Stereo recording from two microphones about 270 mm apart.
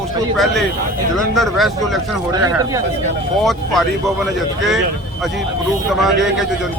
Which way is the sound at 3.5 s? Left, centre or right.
Centre.